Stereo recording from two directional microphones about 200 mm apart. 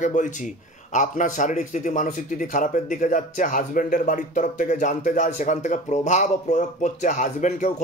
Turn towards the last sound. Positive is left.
turn(degrees=35)  # may be behind; listen again after turning